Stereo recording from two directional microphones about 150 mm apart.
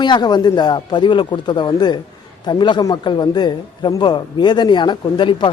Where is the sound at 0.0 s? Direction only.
30° left (ahead or behind).